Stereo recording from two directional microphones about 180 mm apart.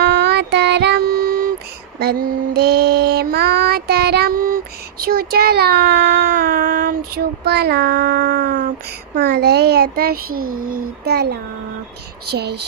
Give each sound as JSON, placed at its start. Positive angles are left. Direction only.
{"t": 0.0, "sound": "child singing", "side_deg": -60}
{"t": 2.0, "sound": "mantra", "side_deg": -60}
{"t": 7.4, "sound": "a child's voice", "side_deg": -65}